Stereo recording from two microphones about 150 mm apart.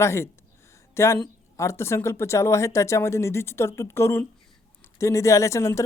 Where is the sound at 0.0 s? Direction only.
20° left (ahead or behind).